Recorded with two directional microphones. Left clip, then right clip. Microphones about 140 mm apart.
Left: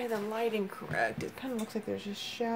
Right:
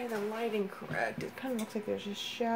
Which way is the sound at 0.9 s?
55° left (ahead or behind).